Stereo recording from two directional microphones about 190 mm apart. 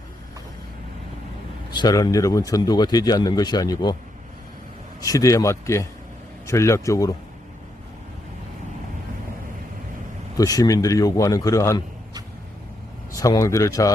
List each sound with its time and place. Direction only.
1.7 s speech: 20° left (ahead or behind)
4.9 s a man's voice: 15° left (ahead or behind)
10.3 s speech: 20° left (ahead or behind)
13.1 s a man's voice: 15° left (ahead or behind)